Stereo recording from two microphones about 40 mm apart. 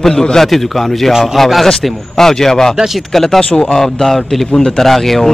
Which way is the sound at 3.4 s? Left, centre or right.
Left.